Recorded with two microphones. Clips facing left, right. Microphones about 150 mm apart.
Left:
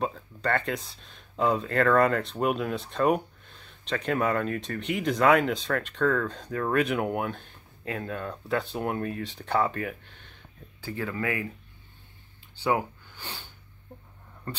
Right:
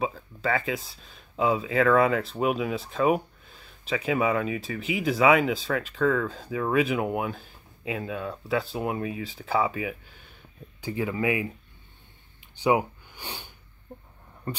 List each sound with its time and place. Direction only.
0.0 s speech: centre (ahead or behind)
12.6 s speech: 15° right (ahead or behind)